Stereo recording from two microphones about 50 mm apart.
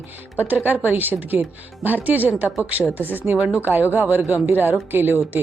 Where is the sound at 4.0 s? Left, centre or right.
Right.